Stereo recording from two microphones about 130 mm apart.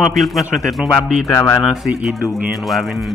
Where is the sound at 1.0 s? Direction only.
5° right (ahead or behind).